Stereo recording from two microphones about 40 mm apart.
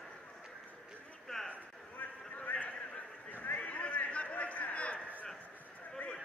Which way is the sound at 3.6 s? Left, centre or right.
Left.